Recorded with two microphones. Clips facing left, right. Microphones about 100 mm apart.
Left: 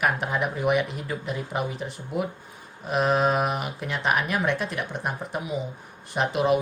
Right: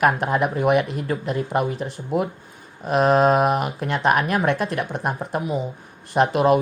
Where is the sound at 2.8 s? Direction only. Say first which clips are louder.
Right 6 dB; 45° right (ahead or behind).